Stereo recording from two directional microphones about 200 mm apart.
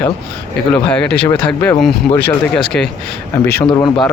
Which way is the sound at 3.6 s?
20° left (ahead or behind).